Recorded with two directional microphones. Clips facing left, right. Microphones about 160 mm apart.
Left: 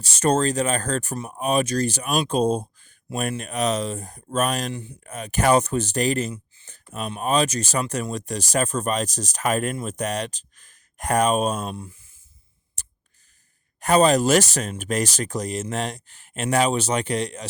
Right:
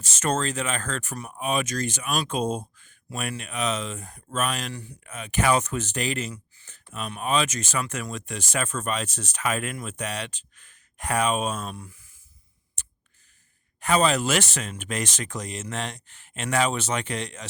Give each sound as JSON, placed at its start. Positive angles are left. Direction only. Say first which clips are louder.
{"t": 0.0, "sound": "speech", "louder": "left 6 dB", "side_deg": 35}
{"t": 4.7, "sound": "speech", "louder": "left 5 dB", "side_deg": 25}
{"t": 5.0, "sound": "speech", "louder": "left 3 dB", "side_deg": 40}
{"t": 13.7, "sound": "speech", "louder": "left 5 dB", "side_deg": 40}